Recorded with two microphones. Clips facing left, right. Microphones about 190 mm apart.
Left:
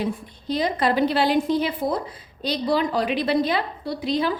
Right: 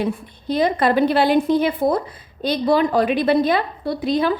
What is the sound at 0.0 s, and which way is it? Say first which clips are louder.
A woman's voice: right 3 dB; 55° right (ahead or behind).